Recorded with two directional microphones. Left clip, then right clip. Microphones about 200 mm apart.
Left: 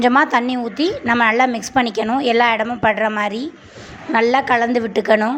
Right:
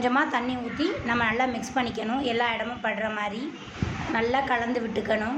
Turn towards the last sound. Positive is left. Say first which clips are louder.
# left 11 dB
turn(degrees=45)  # may be behind; listen again after turning